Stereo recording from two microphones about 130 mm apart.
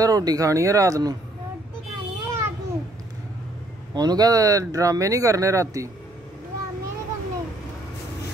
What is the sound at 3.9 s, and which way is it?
Speech, 30° right (ahead or behind).